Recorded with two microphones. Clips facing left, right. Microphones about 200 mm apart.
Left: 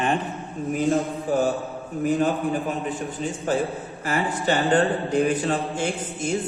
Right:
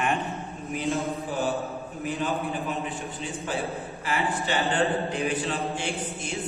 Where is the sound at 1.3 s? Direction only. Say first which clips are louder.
Left 8 dB; 45° left (ahead or behind).